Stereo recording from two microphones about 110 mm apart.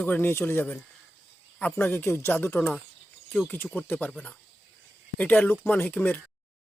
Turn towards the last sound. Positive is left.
turn(degrees=15)  # may be behind; listen again after turning